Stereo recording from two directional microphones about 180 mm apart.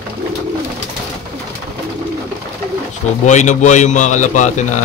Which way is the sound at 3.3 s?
40° left (ahead or behind).